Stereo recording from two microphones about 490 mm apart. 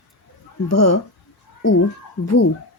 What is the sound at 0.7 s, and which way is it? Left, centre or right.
Speech, left.